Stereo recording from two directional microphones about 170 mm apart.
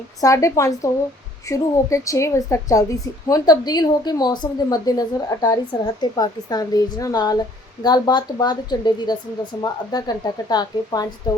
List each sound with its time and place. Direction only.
0.2 s a woman's voice: 20° left (ahead or behind)